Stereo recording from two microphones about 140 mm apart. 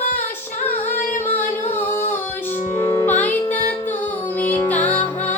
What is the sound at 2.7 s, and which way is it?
Music, 20° left (ahead or behind).